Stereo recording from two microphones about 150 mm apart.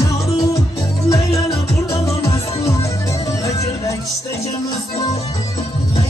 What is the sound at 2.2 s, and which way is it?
Music, 20° left (ahead or behind).